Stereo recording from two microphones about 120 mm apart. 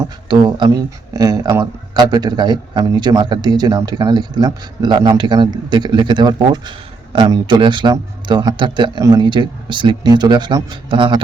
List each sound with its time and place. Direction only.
0.3 s speech: 40° right (ahead or behind)